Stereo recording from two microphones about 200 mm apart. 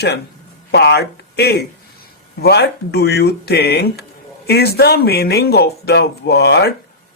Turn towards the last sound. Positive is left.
turn(degrees=55)  # may be behind; listen again after turning